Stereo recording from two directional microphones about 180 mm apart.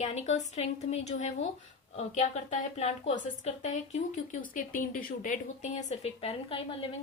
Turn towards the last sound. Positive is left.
turn(degrees=30)  # may be behind; listen again after turning